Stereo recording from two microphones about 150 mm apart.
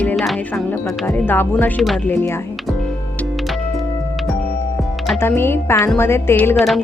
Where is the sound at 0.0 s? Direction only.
5° left (ahead or behind).